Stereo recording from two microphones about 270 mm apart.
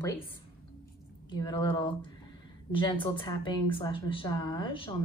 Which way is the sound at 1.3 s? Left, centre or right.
Centre.